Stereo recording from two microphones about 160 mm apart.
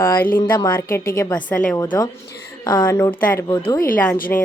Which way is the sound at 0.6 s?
15° left (ahead or behind).